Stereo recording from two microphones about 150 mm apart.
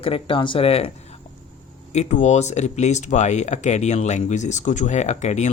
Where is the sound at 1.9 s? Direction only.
50° left (ahead or behind).